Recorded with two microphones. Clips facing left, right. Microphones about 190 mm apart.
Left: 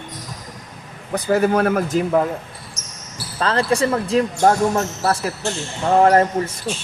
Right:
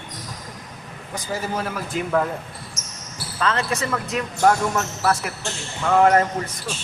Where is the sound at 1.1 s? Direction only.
65° left (ahead or behind).